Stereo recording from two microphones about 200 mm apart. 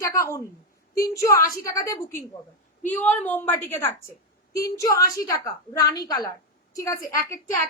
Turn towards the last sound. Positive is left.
turn(degrees=15)  # may be behind; listen again after turning